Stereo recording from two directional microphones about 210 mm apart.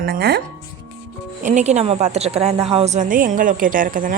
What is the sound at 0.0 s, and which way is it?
Speech, 50° right (ahead or behind).